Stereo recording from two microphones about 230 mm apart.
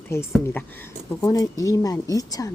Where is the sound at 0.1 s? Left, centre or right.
Centre.